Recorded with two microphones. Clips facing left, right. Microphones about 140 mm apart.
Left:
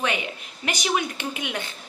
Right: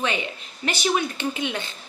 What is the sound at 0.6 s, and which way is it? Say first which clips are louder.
Speech: right 2 dB; 15° left (ahead or behind).